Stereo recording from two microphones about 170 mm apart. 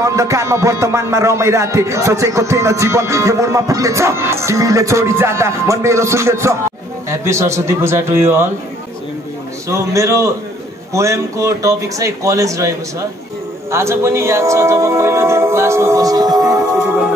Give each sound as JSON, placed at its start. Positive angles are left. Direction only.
{"t": 0.0, "sound": "speech", "side_deg": -20}
{"t": 9.7, "sound": "speech", "side_deg": -15}